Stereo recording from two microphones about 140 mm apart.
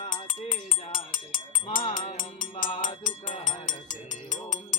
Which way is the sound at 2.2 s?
75° left (ahead or behind).